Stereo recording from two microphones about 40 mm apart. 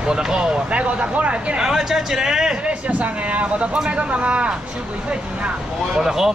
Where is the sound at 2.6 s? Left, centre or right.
Right.